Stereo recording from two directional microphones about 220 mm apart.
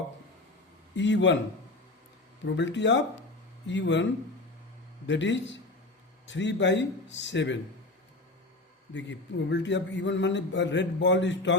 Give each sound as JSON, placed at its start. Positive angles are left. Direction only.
{"t": 0.9, "sound": "a man's voice", "side_deg": 55}
{"t": 2.6, "sound": "a man's voice", "side_deg": 55}
{"t": 5.0, "sound": "a man's voice", "side_deg": 55}
{"t": 8.9, "sound": "a man's voice", "side_deg": 55}